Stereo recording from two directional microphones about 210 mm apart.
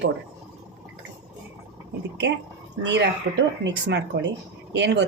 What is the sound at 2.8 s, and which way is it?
A woman's voice, 60° right (ahead or behind).